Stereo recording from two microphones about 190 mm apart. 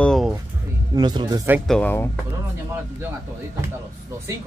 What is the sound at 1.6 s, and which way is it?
Speech, 5° left (ahead or behind).